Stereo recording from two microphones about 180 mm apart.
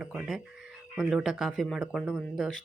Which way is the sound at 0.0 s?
5° right (ahead or behind).